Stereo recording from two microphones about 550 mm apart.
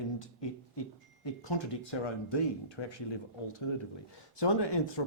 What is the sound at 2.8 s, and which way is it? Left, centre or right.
Speech, left.